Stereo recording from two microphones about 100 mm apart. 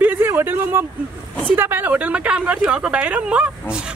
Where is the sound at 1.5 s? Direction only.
20° right (ahead or behind).